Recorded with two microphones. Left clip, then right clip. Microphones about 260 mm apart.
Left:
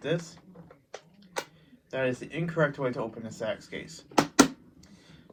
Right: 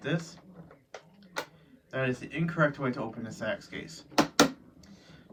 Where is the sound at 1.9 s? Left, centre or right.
Left.